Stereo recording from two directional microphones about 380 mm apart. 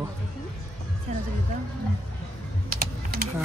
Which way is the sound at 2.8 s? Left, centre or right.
Right.